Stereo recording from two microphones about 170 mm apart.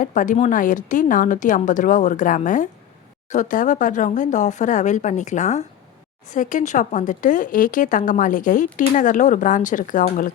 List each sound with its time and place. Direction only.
0.0 s a woman's voice: 50° left (ahead or behind)